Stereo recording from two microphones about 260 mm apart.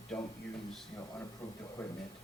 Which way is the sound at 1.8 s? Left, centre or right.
Centre.